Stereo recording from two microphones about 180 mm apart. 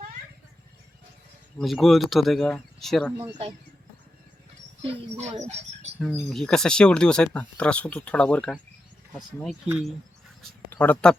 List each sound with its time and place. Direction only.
1.5 s speech: centre (ahead or behind)
4.8 s speech: 30° right (ahead or behind)
6.0 s speech: 5° left (ahead or behind)
10.7 s speech: 10° left (ahead or behind)